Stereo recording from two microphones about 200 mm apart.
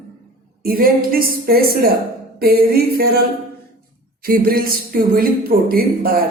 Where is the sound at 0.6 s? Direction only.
45° right (ahead or behind).